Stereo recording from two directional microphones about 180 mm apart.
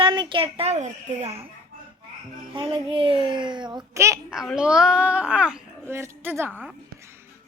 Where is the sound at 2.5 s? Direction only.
30° right (ahead or behind).